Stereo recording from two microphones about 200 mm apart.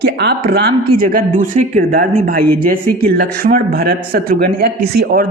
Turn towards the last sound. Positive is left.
turn(degrees=-50)  # may be behind; listen again after turning